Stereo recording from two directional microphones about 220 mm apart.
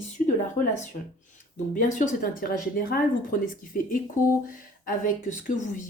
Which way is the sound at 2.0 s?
40° left (ahead or behind).